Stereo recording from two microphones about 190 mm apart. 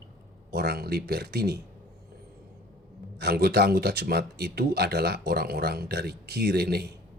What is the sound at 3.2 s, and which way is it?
Speech, 55° right (ahead or behind).